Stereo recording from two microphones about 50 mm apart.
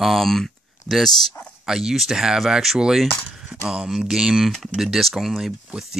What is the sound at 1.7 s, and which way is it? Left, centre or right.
Speech, centre.